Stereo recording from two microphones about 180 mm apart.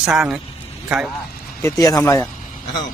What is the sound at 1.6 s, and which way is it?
Speech, 20° left (ahead or behind).